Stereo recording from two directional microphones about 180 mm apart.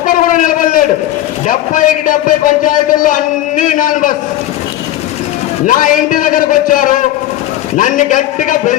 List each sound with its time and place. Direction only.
0.0 s a sound: 50° left (ahead or behind)
1.5 s a man's voice: 45° left (ahead or behind)
5.6 s a man's voice: 50° left (ahead or behind)